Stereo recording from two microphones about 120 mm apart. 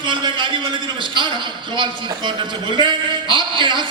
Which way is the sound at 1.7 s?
40° right (ahead or behind).